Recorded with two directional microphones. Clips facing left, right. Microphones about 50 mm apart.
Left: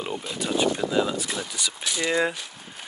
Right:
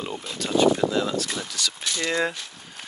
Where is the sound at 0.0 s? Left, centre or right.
Centre.